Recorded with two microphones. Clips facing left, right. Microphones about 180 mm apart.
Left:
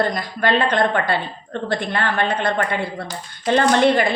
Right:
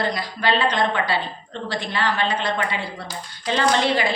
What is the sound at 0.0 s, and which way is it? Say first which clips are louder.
A woman's voice: left 3 dB; 50° left (ahead or behind).